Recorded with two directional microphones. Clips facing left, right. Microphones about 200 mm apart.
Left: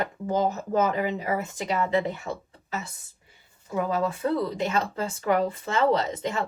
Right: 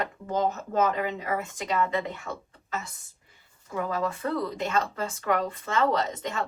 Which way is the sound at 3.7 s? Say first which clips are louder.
Left 3 dB; 25° left (ahead or behind).